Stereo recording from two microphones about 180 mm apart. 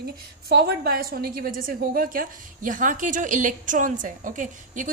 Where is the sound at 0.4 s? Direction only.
55° right (ahead or behind).